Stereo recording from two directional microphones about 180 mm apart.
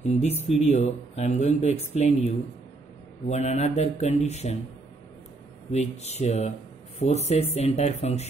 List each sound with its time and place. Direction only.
0.6 s speech: 40° left (ahead or behind)
5.7 s speech: 35° left (ahead or behind)